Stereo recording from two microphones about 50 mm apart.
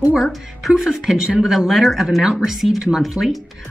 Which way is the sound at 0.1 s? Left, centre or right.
Centre.